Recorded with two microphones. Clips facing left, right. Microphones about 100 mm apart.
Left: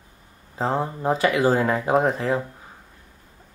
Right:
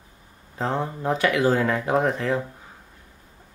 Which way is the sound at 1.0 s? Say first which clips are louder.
Left 1 dB; 35° left (ahead or behind).